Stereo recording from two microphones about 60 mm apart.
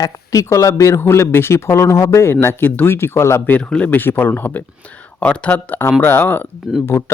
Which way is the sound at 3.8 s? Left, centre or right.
Left.